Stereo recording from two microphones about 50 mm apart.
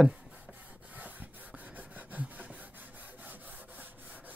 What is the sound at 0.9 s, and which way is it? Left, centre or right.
Wood, right.